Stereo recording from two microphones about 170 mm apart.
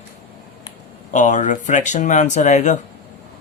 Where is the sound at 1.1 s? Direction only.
45° left (ahead or behind).